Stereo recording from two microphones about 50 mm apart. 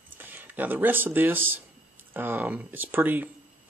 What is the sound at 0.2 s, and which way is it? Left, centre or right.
Speech, right.